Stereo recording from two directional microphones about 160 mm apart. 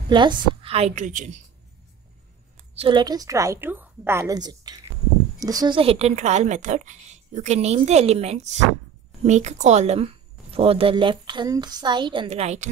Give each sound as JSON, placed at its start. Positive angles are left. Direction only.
{"t": 0.1, "sound": "a woman's voice", "side_deg": -30}
{"t": 2.8, "sound": "a woman's voice", "side_deg": -30}
{"t": 5.8, "sound": "a woman's voice", "side_deg": -40}